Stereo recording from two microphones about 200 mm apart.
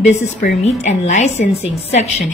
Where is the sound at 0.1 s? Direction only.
35° left (ahead or behind).